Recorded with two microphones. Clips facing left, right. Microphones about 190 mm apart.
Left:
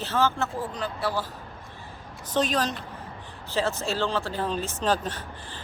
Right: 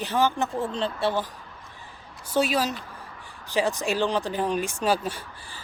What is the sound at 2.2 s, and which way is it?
A woman's voice, 10° right (ahead or behind).